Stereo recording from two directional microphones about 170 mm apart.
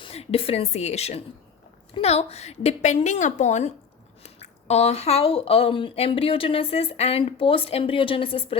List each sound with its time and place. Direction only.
0.0 s speech: 35° left (ahead or behind)